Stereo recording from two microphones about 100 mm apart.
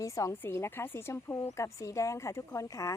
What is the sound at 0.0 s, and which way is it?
A woman's voice, 30° left (ahead or behind).